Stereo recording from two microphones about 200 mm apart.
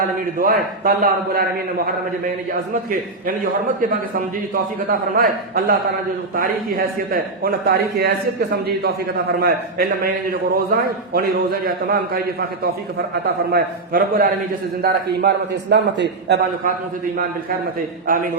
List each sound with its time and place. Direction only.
0.3 s a man's voice: 50° right (ahead or behind)
18.0 s a man's voice: 45° right (ahead or behind)